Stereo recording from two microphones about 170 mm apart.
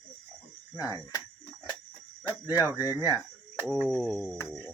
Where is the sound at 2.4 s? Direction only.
10° right (ahead or behind).